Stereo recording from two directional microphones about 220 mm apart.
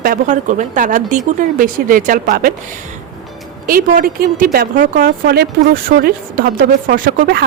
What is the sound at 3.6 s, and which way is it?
Speech, 40° right (ahead or behind).